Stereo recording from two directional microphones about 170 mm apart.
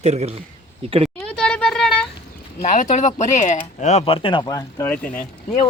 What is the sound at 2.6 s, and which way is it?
Speech, 45° left (ahead or behind).